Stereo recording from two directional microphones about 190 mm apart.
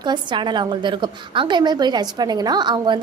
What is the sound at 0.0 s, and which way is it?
A woman's voice, 25° right (ahead or behind).